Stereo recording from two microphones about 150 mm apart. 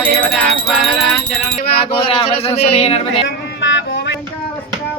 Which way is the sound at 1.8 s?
40° left (ahead or behind).